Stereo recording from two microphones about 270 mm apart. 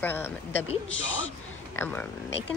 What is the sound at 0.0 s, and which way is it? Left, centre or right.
Speech, centre.